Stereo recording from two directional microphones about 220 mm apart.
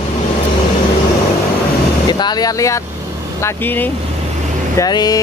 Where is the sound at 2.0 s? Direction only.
20° left (ahead or behind).